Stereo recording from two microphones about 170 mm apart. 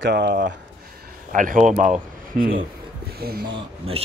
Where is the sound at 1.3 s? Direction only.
50° right (ahead or behind).